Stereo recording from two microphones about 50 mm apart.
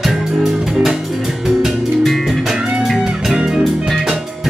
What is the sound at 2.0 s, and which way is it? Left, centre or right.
Music, centre.